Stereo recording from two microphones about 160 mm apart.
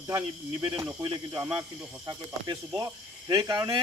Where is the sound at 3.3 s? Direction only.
20° right (ahead or behind).